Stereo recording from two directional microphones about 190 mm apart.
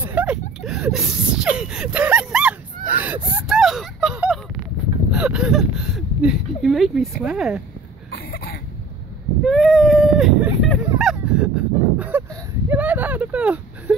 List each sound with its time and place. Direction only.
0.0 s a sound: 10° right (ahead or behind)
2.9 s whimper: 10° right (ahead or behind)
3.3 s a sound: 5° right (ahead or behind)
5.1 s speech: 5° right (ahead or behind)
8.1 s cough: 55° left (ahead or behind)
9.4 s speech: centre (ahead or behind)